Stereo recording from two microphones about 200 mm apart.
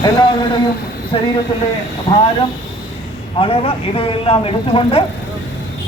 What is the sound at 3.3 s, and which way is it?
Speech, 25° left (ahead or behind).